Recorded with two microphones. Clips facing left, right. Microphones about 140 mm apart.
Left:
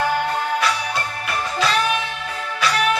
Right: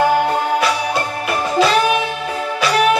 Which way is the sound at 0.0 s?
15° right (ahead or behind).